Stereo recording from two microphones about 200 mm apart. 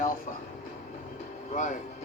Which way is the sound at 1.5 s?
40° left (ahead or behind).